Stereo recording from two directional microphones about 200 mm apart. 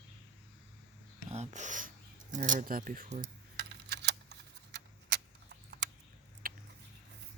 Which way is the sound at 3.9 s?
60° right (ahead or behind).